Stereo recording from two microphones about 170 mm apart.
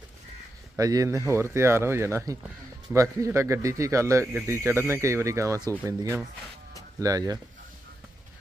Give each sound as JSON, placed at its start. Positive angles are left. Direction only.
{"t": 0.8, "sound": "speech", "side_deg": -20}